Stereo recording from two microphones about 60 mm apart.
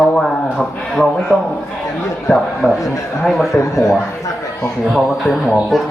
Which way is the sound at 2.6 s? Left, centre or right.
Centre.